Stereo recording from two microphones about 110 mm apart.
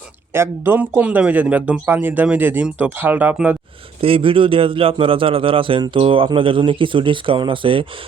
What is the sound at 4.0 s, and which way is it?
A man's voice, 55° right (ahead or behind).